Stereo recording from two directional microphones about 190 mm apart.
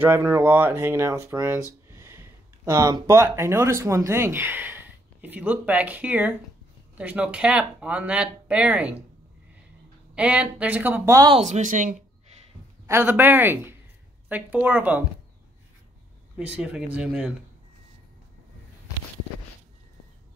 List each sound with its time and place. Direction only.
0.0 s speech: 10° right (ahead or behind)
10.1 s speech: 5° right (ahead or behind)
11.3 s speech: 35° right (ahead or behind)
12.8 s speech: 10° right (ahead or behind)
16.3 s speech: 5° right (ahead or behind)